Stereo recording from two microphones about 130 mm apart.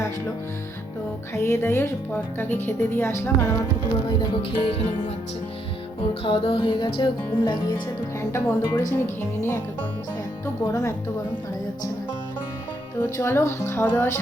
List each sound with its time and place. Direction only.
1.3 s speech: 20° left (ahead or behind)
4.2 s music: 45° left (ahead or behind)
6.2 s music: 45° left (ahead or behind)
8.2 s speech: 20° left (ahead or behind)
13.0 s speech: 20° left (ahead or behind)